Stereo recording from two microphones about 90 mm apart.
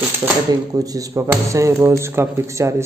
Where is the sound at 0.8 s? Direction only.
40° right (ahead or behind).